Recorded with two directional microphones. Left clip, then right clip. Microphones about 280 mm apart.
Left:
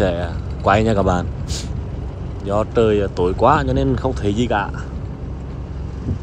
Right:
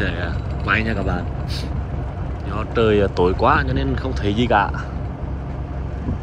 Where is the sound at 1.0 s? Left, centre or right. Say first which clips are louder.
Left 7 dB; right.